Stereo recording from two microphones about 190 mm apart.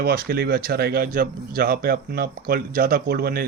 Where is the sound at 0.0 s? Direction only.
55° right (ahead or behind).